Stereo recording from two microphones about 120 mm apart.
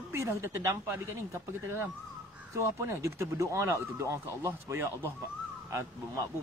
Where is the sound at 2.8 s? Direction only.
25° right (ahead or behind).